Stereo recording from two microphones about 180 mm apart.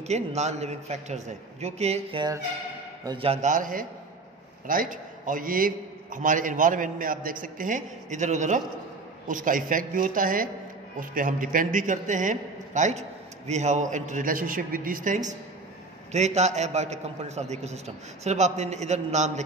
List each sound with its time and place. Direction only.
0.0 s a man's voice: 40° right (ahead or behind)